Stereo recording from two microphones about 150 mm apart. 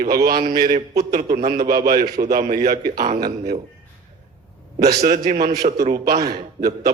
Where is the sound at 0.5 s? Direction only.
90° right.